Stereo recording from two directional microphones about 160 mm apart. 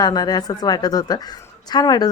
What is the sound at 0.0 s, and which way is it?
A woman's voice, 25° left (ahead or behind).